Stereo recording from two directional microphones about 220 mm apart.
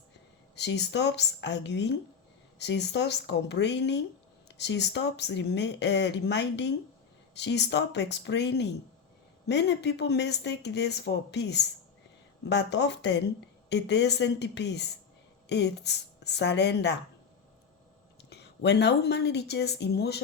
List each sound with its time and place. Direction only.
0.5 s speech: 50° left (ahead or behind)
18.3 s speech: 50° left (ahead or behind)